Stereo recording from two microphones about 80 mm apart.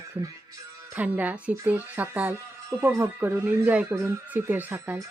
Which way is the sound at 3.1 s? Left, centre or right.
Right.